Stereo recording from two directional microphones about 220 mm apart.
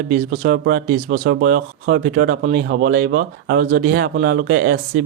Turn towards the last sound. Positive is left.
turn(degrees=-50)  # may be behind; listen again after turning